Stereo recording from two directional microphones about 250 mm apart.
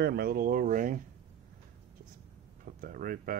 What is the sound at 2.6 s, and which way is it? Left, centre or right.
Speech, right.